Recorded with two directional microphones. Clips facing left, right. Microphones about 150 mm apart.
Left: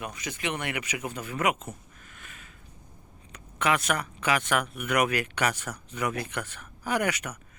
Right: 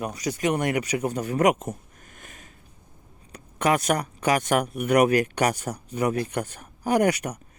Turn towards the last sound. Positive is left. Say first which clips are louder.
# right 7 dB
turn(degrees=-40)  # may be behind; listen again after turning